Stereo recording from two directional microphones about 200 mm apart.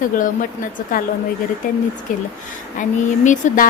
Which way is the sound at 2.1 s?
40° left (ahead or behind).